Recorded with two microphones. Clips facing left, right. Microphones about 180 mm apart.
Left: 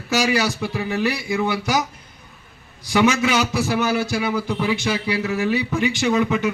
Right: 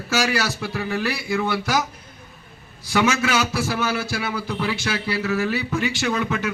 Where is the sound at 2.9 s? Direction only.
15° left (ahead or behind).